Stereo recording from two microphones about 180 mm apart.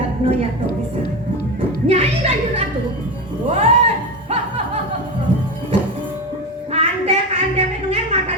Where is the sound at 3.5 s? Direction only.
35° right (ahead or behind).